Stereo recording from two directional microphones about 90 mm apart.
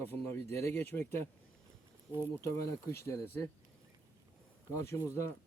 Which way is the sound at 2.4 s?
35° left (ahead or behind).